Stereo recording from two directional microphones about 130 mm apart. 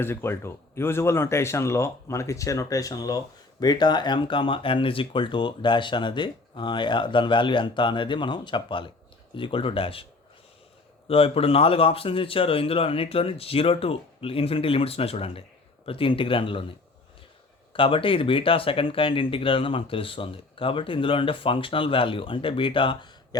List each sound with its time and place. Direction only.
0.0 s speech: 20° left (ahead or behind); by 10.1 s 45° left (ahead or behind)
11.1 s speech: 50° left (ahead or behind)
17.7 s speech: 40° left (ahead or behind)